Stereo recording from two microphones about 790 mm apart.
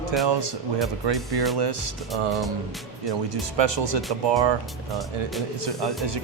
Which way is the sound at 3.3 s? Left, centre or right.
Right.